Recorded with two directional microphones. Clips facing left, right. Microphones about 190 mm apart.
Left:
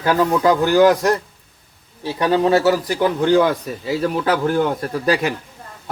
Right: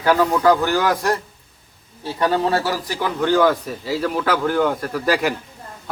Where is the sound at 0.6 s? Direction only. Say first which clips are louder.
Left 6 dB; 20° left (ahead or behind).